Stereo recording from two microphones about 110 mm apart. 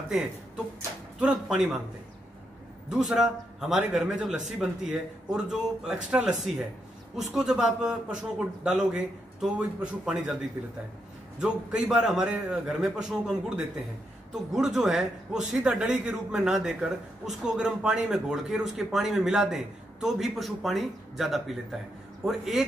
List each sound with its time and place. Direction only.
1.2 s a man's voice: 10° right (ahead or behind)
2.9 s a man's voice: 5° right (ahead or behind)
11.4 s a man's voice: 5° right (ahead or behind)